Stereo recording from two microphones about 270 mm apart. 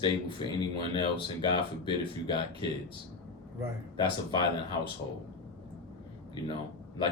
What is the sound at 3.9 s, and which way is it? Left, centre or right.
Speech, centre.